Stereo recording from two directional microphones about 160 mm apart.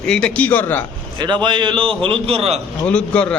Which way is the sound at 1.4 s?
30° right (ahead or behind).